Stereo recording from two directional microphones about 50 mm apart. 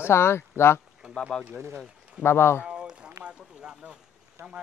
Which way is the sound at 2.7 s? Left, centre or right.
Right.